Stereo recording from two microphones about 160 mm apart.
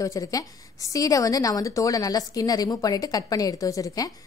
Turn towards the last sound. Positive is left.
turn(degrees=20)  # may be behind; listen again after turning